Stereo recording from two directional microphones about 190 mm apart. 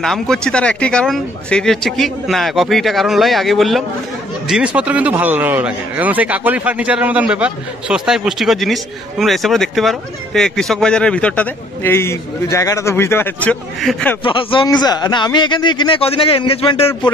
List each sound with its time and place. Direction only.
0.0 s speech: centre (ahead or behind)
14.2 s a man's voice: 25° left (ahead or behind)